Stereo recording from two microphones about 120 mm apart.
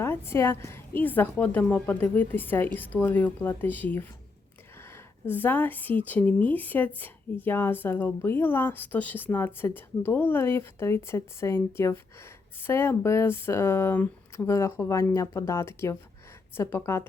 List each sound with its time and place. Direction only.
0.0 s speech: 20° left (ahead or behind)
5.2 s speech: 15° left (ahead or behind)